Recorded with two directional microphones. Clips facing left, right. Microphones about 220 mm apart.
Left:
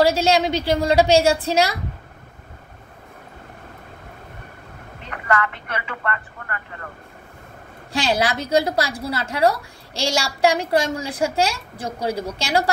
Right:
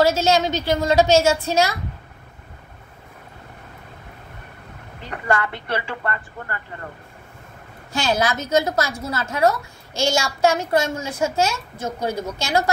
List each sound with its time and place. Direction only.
0.0 s a woman's voice: 30° left (ahead or behind)
5.1 s a woman's voice: 30° right (ahead or behind)
7.9 s a woman's voice: 30° left (ahead or behind)